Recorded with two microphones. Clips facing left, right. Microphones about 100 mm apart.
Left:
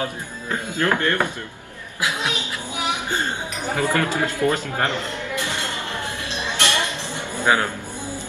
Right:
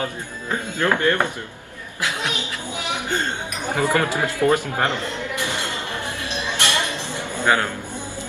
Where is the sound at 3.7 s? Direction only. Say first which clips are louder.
Right 1 dB; 20° right (ahead or behind).